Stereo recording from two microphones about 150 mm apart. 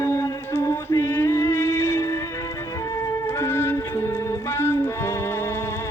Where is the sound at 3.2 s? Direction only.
15° left (ahead or behind).